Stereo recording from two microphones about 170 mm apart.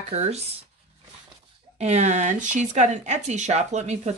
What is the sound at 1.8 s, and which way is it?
Speech, 40° right (ahead or behind).